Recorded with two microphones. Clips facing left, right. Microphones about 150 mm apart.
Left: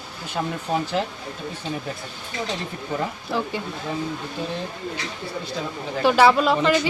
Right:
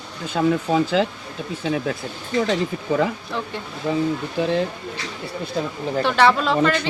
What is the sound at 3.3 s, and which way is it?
Speech, 5° left (ahead or behind).